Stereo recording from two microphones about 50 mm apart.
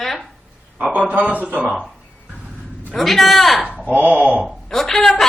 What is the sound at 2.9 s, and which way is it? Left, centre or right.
Speech, centre.